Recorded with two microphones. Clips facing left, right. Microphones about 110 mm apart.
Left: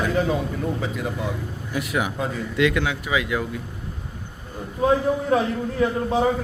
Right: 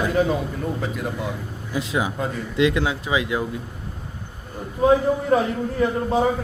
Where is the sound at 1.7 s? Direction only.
25° right (ahead or behind).